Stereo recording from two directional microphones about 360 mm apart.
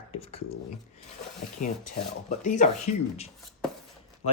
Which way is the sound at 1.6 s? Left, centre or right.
Left.